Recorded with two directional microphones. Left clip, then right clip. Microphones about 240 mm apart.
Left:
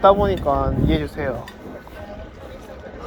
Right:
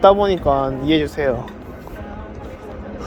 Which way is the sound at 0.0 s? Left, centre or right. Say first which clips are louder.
Right 2 dB; right.